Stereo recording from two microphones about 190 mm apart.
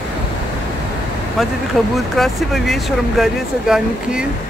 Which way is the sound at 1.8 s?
Centre (ahead or behind).